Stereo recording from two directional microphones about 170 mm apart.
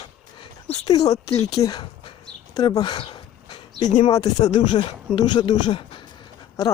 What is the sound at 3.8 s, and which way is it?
Speech, 45° left (ahead or behind).